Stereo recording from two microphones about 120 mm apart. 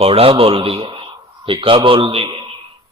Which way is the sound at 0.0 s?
50° right (ahead or behind).